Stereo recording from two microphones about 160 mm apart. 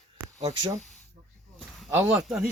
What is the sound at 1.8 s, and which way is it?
Speech, 10° right (ahead or behind).